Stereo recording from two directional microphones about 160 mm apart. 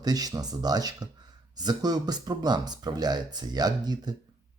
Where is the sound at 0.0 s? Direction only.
25° right (ahead or behind).